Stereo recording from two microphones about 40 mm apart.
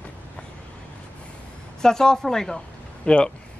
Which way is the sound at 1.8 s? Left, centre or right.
Centre.